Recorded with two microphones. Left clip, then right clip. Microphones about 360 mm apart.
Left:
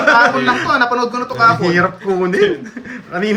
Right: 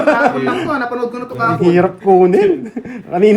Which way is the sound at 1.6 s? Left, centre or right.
Centre.